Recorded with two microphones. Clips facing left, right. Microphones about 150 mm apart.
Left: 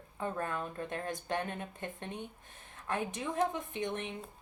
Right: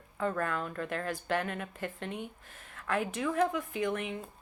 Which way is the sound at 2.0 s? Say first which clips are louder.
Right 3 dB; 90° right.